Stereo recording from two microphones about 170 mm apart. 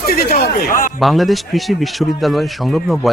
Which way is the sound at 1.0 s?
Centre (ahead or behind).